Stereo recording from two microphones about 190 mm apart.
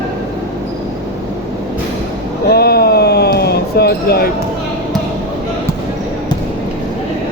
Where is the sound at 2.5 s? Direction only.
55° left (ahead or behind).